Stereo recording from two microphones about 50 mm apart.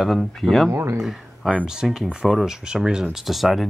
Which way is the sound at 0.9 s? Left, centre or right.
Centre.